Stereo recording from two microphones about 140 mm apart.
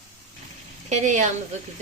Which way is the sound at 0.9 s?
60° right (ahead or behind).